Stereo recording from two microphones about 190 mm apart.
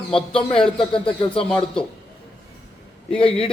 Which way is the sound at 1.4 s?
5° left (ahead or behind).